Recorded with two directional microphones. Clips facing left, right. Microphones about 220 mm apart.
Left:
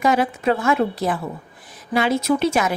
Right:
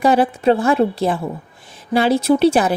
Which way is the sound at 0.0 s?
30° right (ahead or behind).